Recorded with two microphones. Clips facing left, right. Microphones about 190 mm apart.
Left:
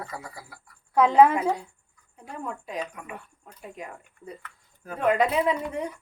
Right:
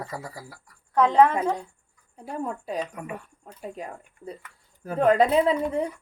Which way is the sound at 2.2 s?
35° right (ahead or behind).